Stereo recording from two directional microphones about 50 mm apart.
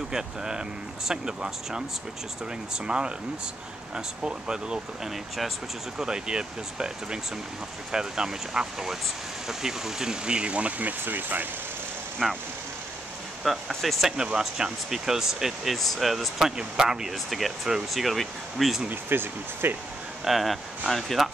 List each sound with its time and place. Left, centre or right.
0.1 s speech: centre; by 11.4 s right
12.2 s speech: centre
13.4 s speech: centre
14.0 s speech: centre
16.5 s speech: centre
17.3 s speech: centre
18.9 s speech: right
20.2 s speech: centre